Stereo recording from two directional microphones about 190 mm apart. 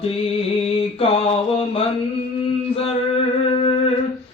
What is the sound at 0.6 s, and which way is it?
Mantra, 30° left (ahead or behind).